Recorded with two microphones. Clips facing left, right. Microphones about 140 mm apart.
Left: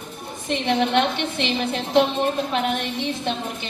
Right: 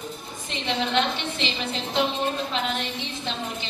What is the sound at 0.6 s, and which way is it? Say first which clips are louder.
A woman's voice: left 4 dB; 55° left (ahead or behind).